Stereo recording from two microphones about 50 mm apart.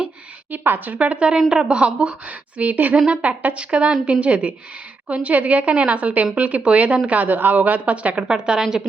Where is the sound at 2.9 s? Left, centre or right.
Right.